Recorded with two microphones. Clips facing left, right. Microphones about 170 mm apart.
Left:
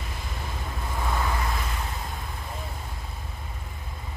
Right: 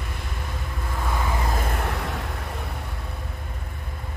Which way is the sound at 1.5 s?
55° right (ahead or behind).